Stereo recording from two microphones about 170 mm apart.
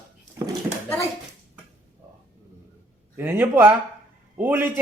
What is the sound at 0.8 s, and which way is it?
Speech, 10° left (ahead or behind).